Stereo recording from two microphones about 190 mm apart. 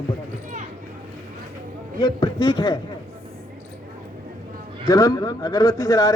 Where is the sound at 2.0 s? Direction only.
25° left (ahead or behind).